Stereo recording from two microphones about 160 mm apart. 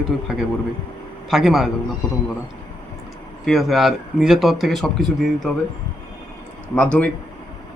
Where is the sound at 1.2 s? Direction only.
Centre (ahead or behind).